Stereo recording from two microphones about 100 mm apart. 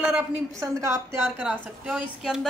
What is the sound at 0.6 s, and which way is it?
Speech, 30° right (ahead or behind).